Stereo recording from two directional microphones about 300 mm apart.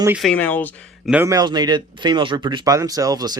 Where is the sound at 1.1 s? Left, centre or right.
Centre.